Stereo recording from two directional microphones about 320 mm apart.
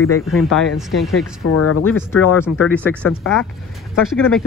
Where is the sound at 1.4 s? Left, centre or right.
Left.